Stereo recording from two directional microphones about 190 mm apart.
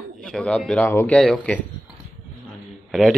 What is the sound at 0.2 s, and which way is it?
Speech, 5° left (ahead or behind).